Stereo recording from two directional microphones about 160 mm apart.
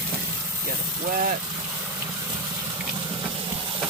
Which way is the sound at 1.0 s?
55° right (ahead or behind).